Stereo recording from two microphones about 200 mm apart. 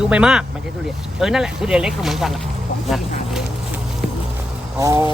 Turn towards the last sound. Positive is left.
turn(degrees=-15)  # may be behind; listen again after turning